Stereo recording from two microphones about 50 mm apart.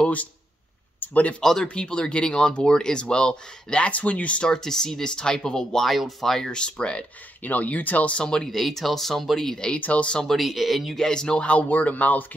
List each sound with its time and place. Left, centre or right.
0.0 s speech: left
1.4 s speech: centre
1.7 s speech: left
4.5 s speech: centre
5.9 s speech: centre
6.6 s speech: left
7.4 s speech: left
8.2 s speech: centre
8.5 s speech: centre
9.8 s speech: left
10.2 s speech: centre
11.0 s speech: centre; by 12.3 s left